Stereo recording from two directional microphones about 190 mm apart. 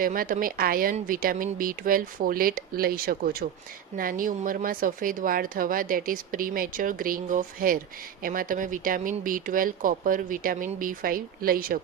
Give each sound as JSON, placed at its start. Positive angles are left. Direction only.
{"t": 0.0, "sound": "speech", "side_deg": -45}